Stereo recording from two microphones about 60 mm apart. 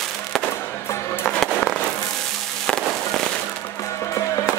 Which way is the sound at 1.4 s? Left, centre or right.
Centre.